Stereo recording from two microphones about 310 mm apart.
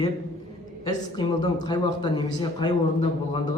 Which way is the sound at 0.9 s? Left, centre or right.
Centre.